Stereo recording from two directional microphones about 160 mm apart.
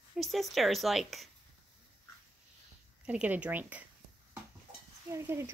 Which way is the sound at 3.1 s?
5° right (ahead or behind).